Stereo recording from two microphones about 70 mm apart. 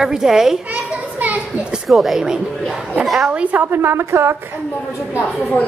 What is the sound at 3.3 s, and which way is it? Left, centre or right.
Speech, centre.